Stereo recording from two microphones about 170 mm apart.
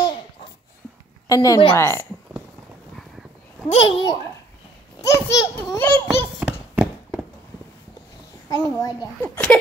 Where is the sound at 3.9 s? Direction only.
25° left (ahead or behind).